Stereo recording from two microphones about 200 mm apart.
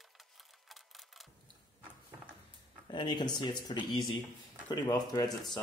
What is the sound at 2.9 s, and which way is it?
Speech, 20° left (ahead or behind).